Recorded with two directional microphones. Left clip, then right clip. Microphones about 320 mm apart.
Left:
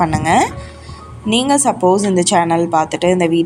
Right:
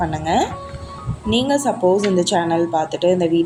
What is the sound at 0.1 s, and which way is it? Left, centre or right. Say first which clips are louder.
Speech: left 5 dB; left.